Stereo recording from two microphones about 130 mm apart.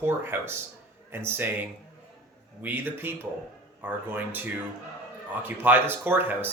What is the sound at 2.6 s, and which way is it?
Speech, 15° right (ahead or behind).